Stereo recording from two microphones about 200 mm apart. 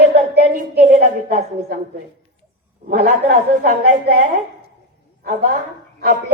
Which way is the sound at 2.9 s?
50° right (ahead or behind).